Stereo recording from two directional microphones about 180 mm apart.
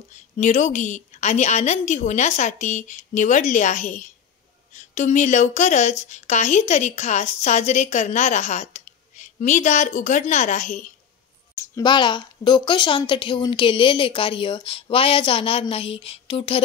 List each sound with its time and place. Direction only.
0.4 s speech: 40° left (ahead or behind)
11.5 s speech: 15° left (ahead or behind)